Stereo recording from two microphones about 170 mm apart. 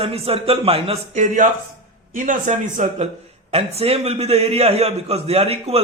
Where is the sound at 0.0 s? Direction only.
35° right (ahead or behind).